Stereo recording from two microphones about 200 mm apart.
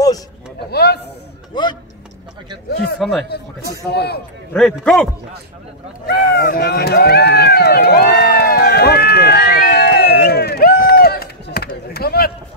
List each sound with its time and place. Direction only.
0.7 s a sound: 55° left (ahead or behind)
1.5 s speech: 25° left (ahead or behind)
2.7 s speech: 55° left (ahead or behind)
3.0 s a man's voice: centre (ahead or behind)
3.9 s a man's voice: 55° left (ahead or behind)
4.6 s a man's voice: 5° left (ahead or behind)
6.0 s run: 55° left (ahead or behind)